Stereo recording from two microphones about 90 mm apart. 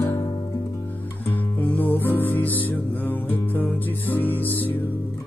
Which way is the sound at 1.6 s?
20° left (ahead or behind).